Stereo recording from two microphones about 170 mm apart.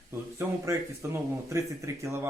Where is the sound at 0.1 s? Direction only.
15° right (ahead or behind).